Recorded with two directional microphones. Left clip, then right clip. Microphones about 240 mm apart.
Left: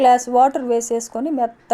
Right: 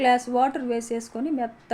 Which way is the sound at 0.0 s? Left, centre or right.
Left.